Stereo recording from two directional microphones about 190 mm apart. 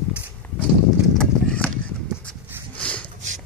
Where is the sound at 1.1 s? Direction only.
5° left (ahead or behind).